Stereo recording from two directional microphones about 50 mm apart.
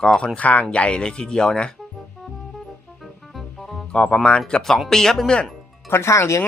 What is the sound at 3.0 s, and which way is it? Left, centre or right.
Music, centre.